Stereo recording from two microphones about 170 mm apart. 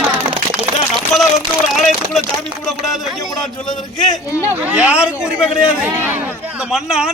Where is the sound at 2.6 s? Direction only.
Centre (ahead or behind).